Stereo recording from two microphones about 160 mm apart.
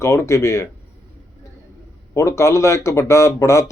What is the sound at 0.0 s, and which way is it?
Speech, 15° left (ahead or behind).